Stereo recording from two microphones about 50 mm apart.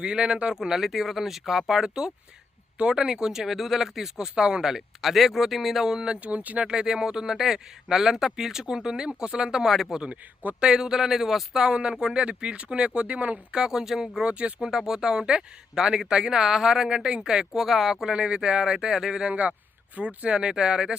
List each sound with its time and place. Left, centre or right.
0.0 s speech: centre
6.1 s speech: right
6.7 s speech: centre
13.5 s speech: centre
14.2 s speech: right
14.6 s speech: centre